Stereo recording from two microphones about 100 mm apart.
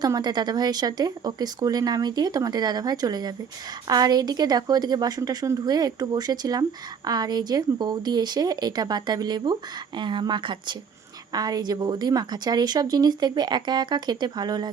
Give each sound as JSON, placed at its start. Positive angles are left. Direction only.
{"t": 0.0, "sound": "a woman's voice", "side_deg": -45}